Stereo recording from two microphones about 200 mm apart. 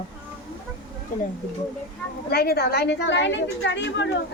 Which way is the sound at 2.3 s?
50° left (ahead or behind).